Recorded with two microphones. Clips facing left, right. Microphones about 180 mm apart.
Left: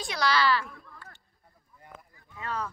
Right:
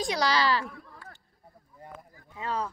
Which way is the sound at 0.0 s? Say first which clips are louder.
Right 1 dB; 35° right (ahead or behind).